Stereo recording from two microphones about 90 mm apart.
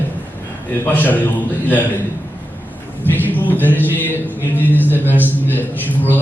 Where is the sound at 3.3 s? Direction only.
20° left (ahead or behind).